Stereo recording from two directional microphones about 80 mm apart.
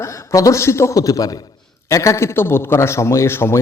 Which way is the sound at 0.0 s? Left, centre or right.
Left.